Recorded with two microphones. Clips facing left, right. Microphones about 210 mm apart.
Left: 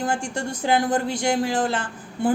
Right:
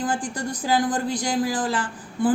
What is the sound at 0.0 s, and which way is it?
Speech, 25° left (ahead or behind).